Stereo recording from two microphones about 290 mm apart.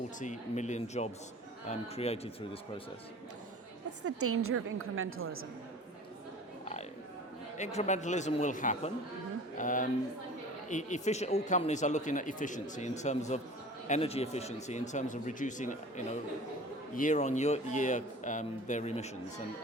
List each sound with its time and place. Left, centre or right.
0.2 s speech: left
4.0 s a woman's voice: right
7.5 s speech: left